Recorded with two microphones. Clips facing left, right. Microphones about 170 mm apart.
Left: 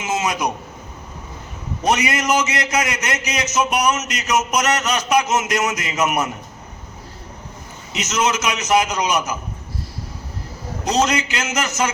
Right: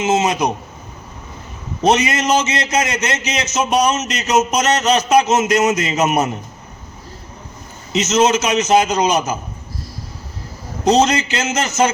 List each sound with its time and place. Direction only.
0.0 s a man's voice: 25° right (ahead or behind)
1.8 s a man's voice: 25° right (ahead or behind)
7.9 s a man's voice: 25° right (ahead or behind)
10.8 s a man's voice: 25° right (ahead or behind)